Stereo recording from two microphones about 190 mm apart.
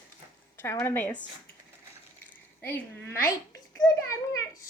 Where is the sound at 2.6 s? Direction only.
10° left (ahead or behind).